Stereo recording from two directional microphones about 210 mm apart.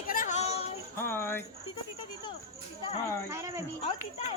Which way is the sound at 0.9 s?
10° left (ahead or behind).